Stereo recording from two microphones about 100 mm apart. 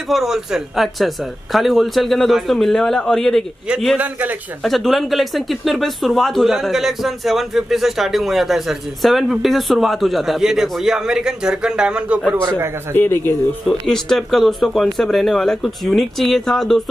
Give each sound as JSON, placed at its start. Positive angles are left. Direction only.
{"t": 0.1, "sound": "speech", "side_deg": 0}
{"t": 4.0, "sound": "a man's voice", "side_deg": -15}
{"t": 4.6, "sound": "speech", "side_deg": 0}
{"t": 12.4, "sound": "a man's voice", "side_deg": -25}
{"t": 12.9, "sound": "a man's voice", "side_deg": 20}
{"t": 13.7, "sound": "speech", "side_deg": 5}